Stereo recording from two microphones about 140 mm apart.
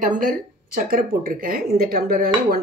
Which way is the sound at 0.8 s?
90° right.